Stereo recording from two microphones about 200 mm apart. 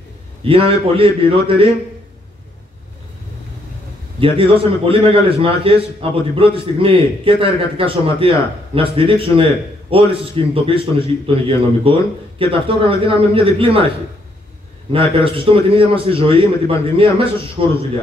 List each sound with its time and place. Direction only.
0.4 s a man's voice: 25° right (ahead or behind)
4.2 s a man's voice: 25° right (ahead or behind)
14.9 s a man's voice: 25° right (ahead or behind)